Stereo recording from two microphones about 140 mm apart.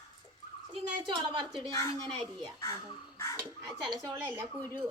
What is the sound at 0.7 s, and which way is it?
Speech, 35° right (ahead or behind).